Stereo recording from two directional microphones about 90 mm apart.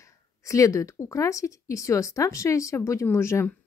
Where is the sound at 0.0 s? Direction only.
35° left (ahead or behind).